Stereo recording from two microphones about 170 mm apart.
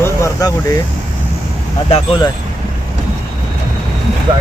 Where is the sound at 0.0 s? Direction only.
20° left (ahead or behind).